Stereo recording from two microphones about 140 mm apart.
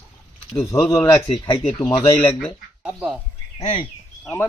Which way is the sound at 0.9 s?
20° left (ahead or behind).